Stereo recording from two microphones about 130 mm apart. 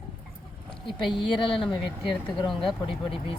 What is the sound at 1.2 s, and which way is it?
Speech, 40° left (ahead or behind).